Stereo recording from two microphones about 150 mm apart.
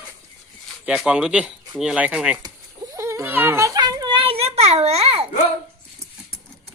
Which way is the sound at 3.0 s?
20° right (ahead or behind).